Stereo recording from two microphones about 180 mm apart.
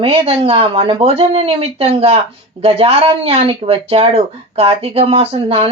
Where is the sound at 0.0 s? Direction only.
35° right (ahead or behind).